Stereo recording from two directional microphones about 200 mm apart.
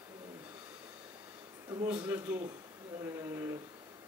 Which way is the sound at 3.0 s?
10° right (ahead or behind).